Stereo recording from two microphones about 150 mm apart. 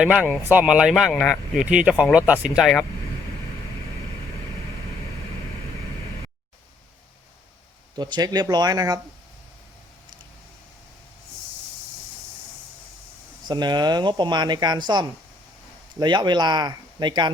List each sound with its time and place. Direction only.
0.0 s speech: 5° right (ahead or behind)
2.6 s speech: centre (ahead or behind)
7.9 s speech: 30° right (ahead or behind)
13.5 s speech: 30° right (ahead or behind)